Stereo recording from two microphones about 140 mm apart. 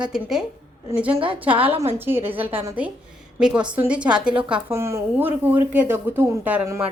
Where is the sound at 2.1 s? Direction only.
15° right (ahead or behind).